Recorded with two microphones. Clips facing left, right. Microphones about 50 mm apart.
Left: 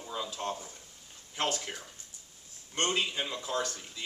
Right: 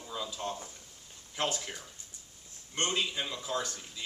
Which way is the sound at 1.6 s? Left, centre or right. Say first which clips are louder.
Left 1 dB; centre.